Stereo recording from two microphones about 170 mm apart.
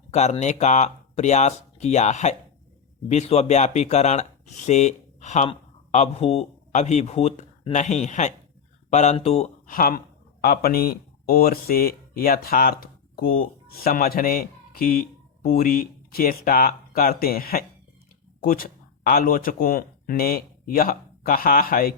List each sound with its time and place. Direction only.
0.1 s speech: 40° left (ahead or behind)
9.7 s speech: 55° left (ahead or behind)